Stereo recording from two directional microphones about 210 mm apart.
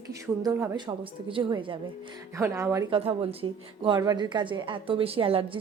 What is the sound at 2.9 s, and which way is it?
A woman's voice, 25° right (ahead or behind).